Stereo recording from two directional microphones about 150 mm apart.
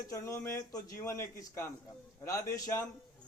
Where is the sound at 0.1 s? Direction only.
20° left (ahead or behind).